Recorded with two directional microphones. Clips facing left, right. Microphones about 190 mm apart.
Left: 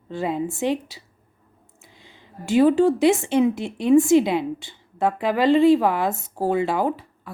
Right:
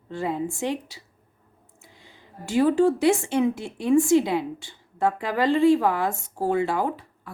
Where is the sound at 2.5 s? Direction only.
20° left (ahead or behind).